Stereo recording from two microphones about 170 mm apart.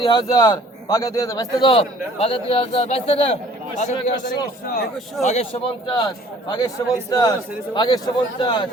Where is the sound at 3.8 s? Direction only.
45° left (ahead or behind); by 6.1 s 30° left (ahead or behind).